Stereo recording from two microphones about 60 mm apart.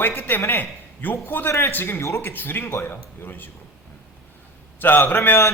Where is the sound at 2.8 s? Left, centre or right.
Left.